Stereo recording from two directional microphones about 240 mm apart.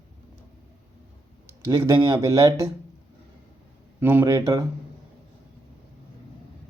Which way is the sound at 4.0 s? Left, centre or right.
Centre.